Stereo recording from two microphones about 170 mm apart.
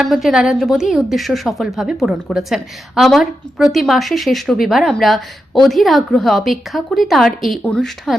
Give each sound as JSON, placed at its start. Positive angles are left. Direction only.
{"t": 0.0, "sound": "a woman's voice", "side_deg": 0}